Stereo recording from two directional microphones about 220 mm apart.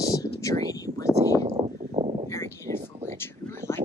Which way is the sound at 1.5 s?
25° right (ahead or behind).